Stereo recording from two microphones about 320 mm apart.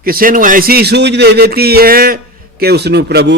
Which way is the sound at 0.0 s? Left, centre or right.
Right.